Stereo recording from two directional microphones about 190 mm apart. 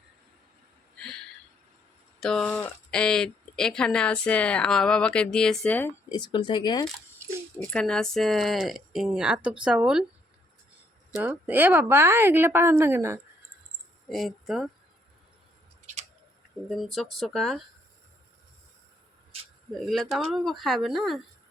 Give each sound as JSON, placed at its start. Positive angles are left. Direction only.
{"t": 0.9, "sound": "a sound", "side_deg": 5}
{"t": 2.2, "sound": "speech", "side_deg": 5}
{"t": 6.1, "sound": "speech", "side_deg": 25}
{"t": 7.6, "sound": "speech", "side_deg": 5}
{"t": 11.1, "sound": "a woman's voice", "side_deg": -10}
{"t": 14.1, "sound": "speech", "side_deg": 0}
{"t": 16.6, "sound": "speech", "side_deg": 0}
{"t": 19.9, "sound": "speech", "side_deg": 0}